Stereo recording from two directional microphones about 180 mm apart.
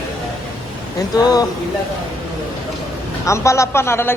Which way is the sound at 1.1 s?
20° left (ahead or behind).